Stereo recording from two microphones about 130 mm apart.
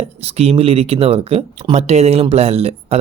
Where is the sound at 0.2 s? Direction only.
50° right (ahead or behind).